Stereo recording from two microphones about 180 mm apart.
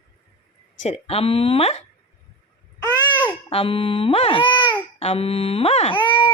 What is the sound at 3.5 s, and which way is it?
A woman's voice, 30° left (ahead or behind).